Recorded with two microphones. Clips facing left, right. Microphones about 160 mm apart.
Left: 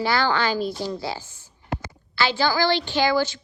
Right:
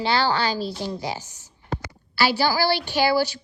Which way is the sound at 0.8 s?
15° right (ahead or behind).